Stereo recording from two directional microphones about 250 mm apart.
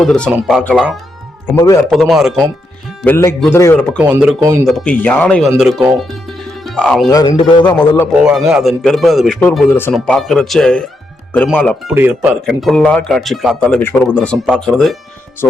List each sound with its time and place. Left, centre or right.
0.0 s a man's voice: centre
1.9 s a man's voice: centre
3.9 s a man's voice: centre
7.1 s speech: centre
7.8 s a man's voice: centre
11.9 s a man's voice: centre